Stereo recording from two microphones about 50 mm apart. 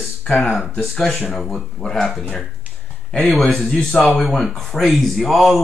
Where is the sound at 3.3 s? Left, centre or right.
Centre.